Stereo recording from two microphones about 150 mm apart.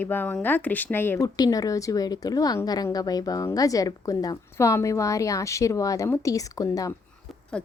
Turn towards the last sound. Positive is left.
turn(degrees=5)  # may be behind; listen again after turning